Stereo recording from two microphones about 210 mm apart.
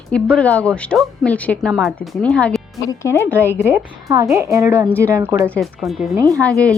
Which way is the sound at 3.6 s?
10° right (ahead or behind).